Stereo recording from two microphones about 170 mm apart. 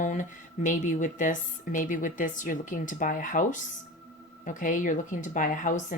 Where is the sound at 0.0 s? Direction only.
45° left (ahead or behind).